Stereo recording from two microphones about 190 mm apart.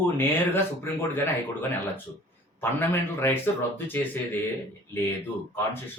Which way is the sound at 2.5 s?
10° left (ahead or behind).